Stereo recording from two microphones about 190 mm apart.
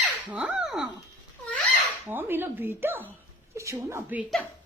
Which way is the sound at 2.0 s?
10° right (ahead or behind).